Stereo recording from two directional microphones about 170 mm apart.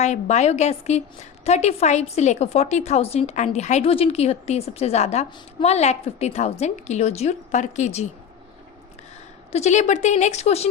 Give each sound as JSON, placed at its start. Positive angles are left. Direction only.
{"t": 0.0, "sound": "a woman's voice", "side_deg": 40}
{"t": 9.5, "sound": "speech", "side_deg": 40}